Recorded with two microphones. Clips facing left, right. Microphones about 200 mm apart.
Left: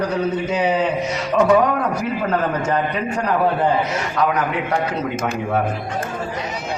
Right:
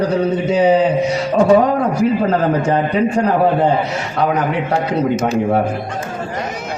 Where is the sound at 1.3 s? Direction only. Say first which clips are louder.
Right 3 dB; 30° right (ahead or behind).